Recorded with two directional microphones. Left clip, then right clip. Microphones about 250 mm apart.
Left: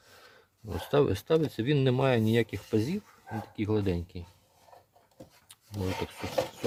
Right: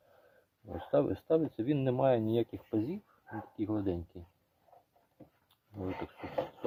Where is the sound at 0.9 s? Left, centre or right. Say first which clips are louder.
Left 4 dB; left.